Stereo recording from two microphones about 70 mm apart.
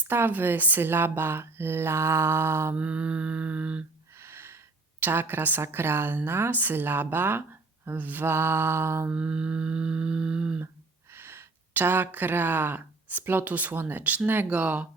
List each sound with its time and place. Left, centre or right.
0.1 s a woman's voice: right
2.7 s mantra: centre
4.2 s a woman's voice: right
9.0 s music: centre
11.1 s speech: right
14.5 s mantra: centre